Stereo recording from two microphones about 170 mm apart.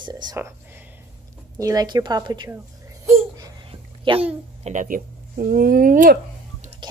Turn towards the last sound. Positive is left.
turn(degrees=-25)  # may be behind; listen again after turning